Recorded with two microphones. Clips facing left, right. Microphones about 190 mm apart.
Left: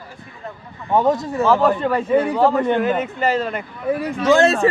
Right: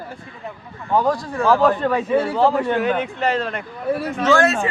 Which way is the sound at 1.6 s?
Centre (ahead or behind).